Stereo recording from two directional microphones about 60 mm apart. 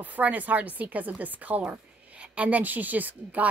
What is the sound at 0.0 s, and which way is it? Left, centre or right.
A woman's voice, right.